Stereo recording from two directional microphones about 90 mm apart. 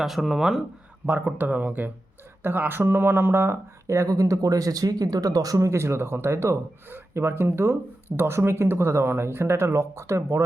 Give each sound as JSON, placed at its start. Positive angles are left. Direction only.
{"t": 0.0, "sound": "speech", "side_deg": 0}
{"t": 1.0, "sound": "speech", "side_deg": -20}